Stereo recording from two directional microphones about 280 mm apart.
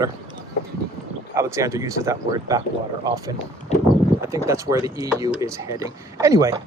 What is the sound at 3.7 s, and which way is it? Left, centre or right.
Clip-clop, left.